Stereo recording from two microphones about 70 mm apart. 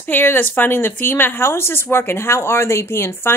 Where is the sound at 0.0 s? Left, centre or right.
Left.